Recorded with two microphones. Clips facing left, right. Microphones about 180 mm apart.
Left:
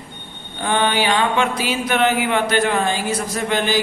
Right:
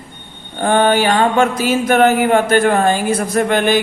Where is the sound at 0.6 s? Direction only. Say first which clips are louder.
Right 6 dB; 45° right (ahead or behind).